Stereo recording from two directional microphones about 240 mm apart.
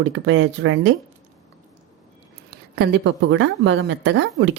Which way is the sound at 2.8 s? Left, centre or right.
Right.